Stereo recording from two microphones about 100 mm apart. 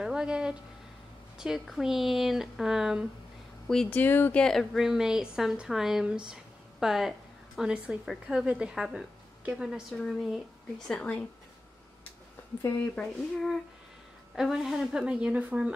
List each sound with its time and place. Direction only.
0.0 s a woman's voice: 10° right (ahead or behind)
3.9 s speech: 20° left (ahead or behind)
4.4 s a woman's voice: 5° left (ahead or behind)
12.9 s a woman's voice: 5° left (ahead or behind); by 15.7 s 10° right (ahead or behind)